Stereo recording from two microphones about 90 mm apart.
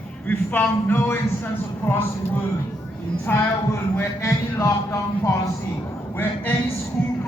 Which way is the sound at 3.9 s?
30° left (ahead or behind).